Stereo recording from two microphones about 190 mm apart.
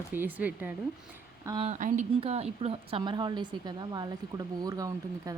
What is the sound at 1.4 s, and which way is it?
Speech, 25° right (ahead or behind).